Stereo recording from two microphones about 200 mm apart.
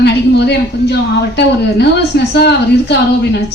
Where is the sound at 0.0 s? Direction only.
55° left (ahead or behind).